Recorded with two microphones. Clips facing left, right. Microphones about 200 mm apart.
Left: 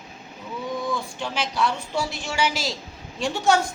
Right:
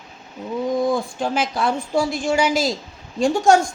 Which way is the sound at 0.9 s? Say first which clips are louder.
Right 7 dB; 50° right (ahead or behind).